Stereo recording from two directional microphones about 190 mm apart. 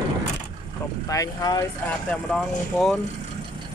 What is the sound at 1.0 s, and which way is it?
Speech, 20° left (ahead or behind).